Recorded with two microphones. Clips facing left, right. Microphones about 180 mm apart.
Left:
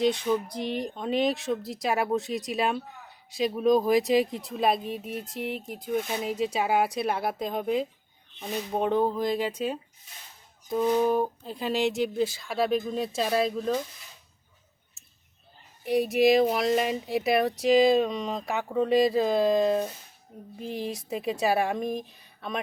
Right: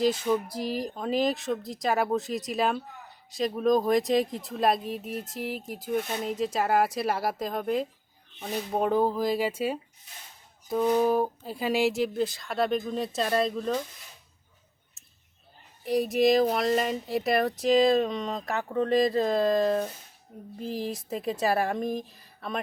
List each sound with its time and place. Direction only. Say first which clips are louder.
0.0 s speech: even; 5° right (ahead or behind)
15.8 s speech: left 1 dB; centre (ahead or behind)